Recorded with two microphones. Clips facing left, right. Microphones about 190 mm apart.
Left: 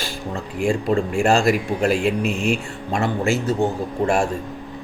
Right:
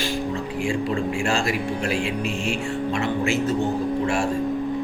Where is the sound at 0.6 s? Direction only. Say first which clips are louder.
Left 5 dB; 45° left (ahead or behind).